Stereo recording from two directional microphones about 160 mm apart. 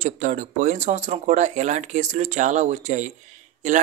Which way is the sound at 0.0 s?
50° right (ahead or behind).